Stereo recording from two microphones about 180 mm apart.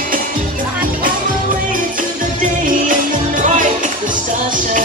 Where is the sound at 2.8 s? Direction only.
45° right (ahead or behind).